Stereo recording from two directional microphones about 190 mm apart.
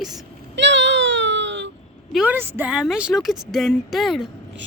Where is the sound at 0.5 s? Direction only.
70° right (ahead or behind).